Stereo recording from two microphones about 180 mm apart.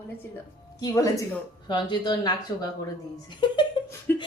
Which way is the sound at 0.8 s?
20° left (ahead or behind).